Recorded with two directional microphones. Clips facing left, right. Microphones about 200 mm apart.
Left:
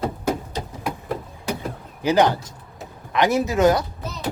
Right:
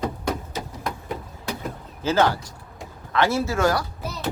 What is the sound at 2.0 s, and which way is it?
Speech, 15° left (ahead or behind).